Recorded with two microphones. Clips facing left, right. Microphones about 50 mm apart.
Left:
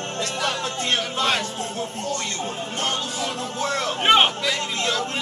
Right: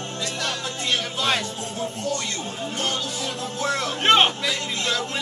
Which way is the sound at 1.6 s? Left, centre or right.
Left.